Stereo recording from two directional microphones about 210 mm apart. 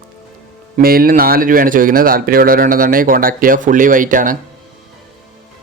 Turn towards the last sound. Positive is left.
turn(degrees=-40)  # may be behind; listen again after turning